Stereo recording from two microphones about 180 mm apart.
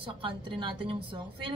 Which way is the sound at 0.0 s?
30° right (ahead or behind).